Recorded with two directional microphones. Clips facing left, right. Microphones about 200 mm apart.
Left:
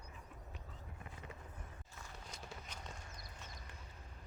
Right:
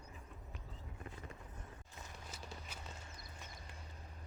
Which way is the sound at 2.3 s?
5° right (ahead or behind).